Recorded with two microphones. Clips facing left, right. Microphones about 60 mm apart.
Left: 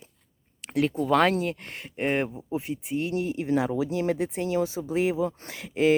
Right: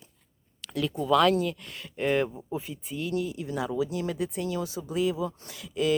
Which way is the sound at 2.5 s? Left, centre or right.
Left.